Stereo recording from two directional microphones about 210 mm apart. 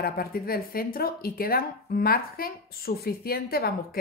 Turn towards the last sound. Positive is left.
turn(degrees=45)  # may be behind; listen again after turning